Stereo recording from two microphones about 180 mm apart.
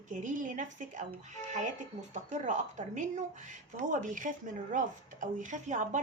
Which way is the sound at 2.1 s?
40° right (ahead or behind).